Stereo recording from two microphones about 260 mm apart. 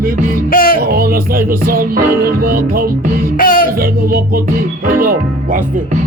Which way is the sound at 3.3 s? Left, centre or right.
Left.